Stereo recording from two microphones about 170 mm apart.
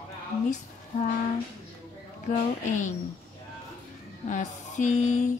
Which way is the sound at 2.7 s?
45° left (ahead or behind).